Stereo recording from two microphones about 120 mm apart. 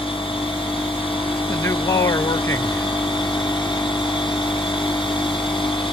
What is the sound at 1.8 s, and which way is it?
Speech, 45° left (ahead or behind).